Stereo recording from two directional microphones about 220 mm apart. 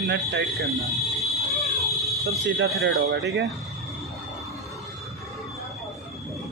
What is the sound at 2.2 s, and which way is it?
Speech, 55° right (ahead or behind).